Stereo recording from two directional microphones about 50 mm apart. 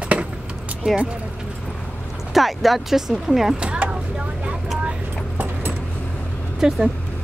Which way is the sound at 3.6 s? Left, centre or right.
Right.